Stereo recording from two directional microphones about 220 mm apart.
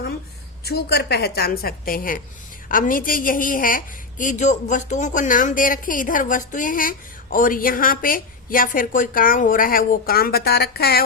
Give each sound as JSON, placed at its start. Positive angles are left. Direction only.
{"t": 0.6, "sound": "a woman's voice", "side_deg": 45}